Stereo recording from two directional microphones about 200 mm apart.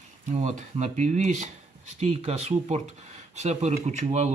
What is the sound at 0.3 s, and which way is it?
Mantra, 35° right (ahead or behind).